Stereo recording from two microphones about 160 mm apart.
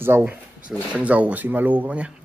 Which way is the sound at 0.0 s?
10° right (ahead or behind).